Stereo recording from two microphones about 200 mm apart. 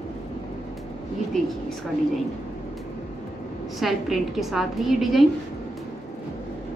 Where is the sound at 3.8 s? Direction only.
Centre (ahead or behind).